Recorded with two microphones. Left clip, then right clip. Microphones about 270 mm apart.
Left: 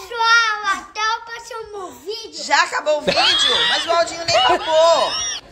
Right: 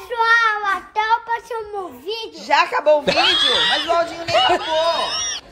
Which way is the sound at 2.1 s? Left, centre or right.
Centre.